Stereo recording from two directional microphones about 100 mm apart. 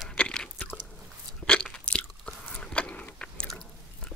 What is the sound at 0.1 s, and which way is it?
Biting, 10° left (ahead or behind).